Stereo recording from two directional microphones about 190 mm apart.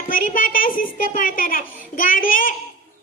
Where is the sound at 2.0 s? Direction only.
45° left (ahead or behind).